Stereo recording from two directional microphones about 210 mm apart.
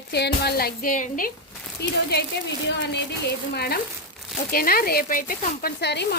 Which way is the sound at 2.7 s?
55° left (ahead or behind).